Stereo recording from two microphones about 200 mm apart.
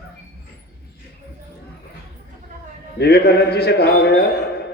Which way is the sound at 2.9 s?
55° left (ahead or behind).